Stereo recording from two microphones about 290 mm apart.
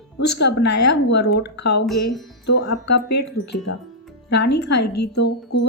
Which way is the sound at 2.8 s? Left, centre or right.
Left.